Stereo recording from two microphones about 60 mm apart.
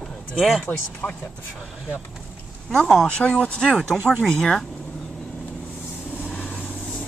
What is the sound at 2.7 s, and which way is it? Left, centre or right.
Speech, centre.